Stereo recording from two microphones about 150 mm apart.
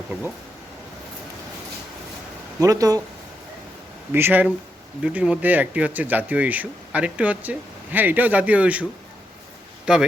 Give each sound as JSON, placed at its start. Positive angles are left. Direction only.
{"t": 2.6, "sound": "speech", "side_deg": -25}
{"t": 4.1, "sound": "speech", "side_deg": -15}